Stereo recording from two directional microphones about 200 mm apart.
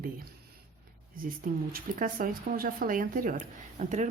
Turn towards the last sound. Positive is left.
turn(degrees=-35)  # may be behind; listen again after turning